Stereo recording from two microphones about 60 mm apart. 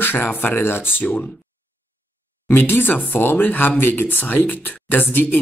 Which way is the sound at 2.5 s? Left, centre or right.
Left.